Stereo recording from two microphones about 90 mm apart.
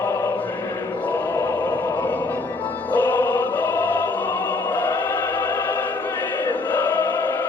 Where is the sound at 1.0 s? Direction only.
15° left (ahead or behind).